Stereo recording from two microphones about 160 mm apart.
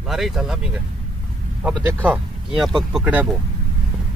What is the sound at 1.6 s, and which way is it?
Speech, 10° right (ahead or behind).